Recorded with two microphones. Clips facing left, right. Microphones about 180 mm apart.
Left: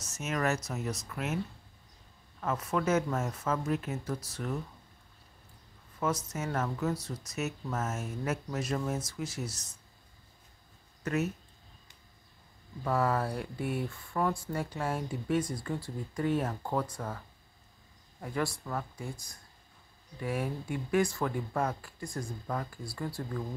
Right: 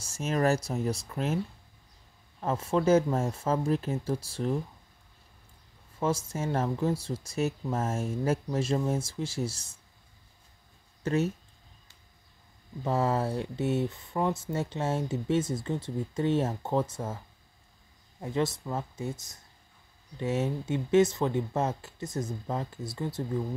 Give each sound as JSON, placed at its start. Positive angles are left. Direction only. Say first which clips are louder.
{"t": 0.0, "sound": "speech", "louder": "right 5 dB", "side_deg": -30}
{"t": 2.4, "sound": "speech", "louder": "right 5 dB", "side_deg": -30}
{"t": 5.9, "sound": "speech", "louder": "right 3 dB", "side_deg": -30}
{"t": 11.1, "sound": "speech", "louder": "right 4 dB", "side_deg": -30}
{"t": 12.8, "sound": "speech", "louder": "right 2 dB", "side_deg": -25}
{"t": 18.2, "sound": "speech", "louder": "right 4 dB", "side_deg": -20}